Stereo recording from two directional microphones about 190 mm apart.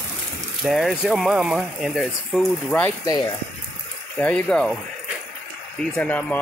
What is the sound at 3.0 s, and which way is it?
Speech, 20° left (ahead or behind).